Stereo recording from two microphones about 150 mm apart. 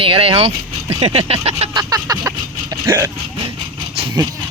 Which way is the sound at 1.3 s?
45° right (ahead or behind).